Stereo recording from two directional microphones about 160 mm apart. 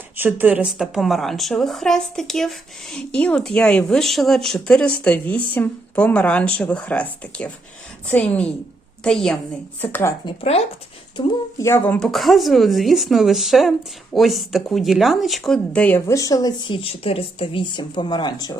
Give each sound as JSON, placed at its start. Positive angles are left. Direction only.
{"t": 0.2, "sound": "speech", "side_deg": -10}
{"t": 9.8, "sound": "speech", "side_deg": 15}
{"t": 10.2, "sound": "speech", "side_deg": 40}
{"t": 11.6, "sound": "speech", "side_deg": 15}
{"t": 11.9, "sound": "speech", "side_deg": 0}
{"t": 16.0, "sound": "speech", "side_deg": 20}